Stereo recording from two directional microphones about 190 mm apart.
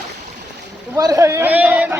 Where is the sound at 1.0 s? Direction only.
20° right (ahead or behind).